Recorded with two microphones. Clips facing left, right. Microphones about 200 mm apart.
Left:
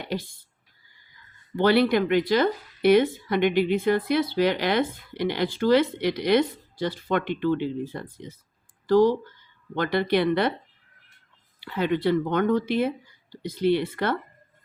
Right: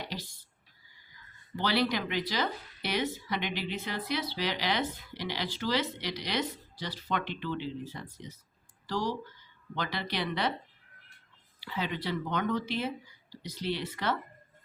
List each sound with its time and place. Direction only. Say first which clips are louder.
0.0 s speech: left 9 dB; 55° left (ahead or behind)
1.5 s speech: left 10 dB; 55° left (ahead or behind)
11.6 s speech: left 11 dB; 55° left (ahead or behind)